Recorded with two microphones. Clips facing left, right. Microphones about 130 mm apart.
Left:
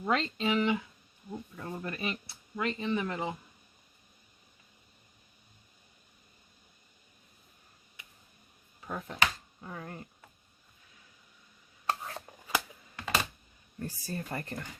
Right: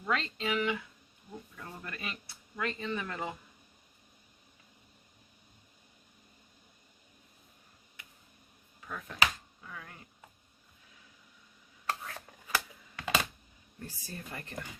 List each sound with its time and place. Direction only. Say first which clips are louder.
0.0 s speech: left 4 dB; 25° left (ahead or behind)
8.8 s speech: left 1 dB; 35° left (ahead or behind)
11.9 s chopping: left 3 dB; 25° left (ahead or behind)
13.0 s computer keyboard: even; centre (ahead or behind)
13.7 s speech: left 7 dB; 45° left (ahead or behind)